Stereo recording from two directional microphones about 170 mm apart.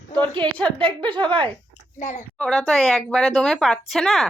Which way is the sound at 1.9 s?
45° left (ahead or behind).